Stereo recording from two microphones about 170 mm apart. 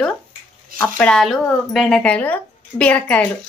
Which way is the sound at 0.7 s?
5° left (ahead or behind).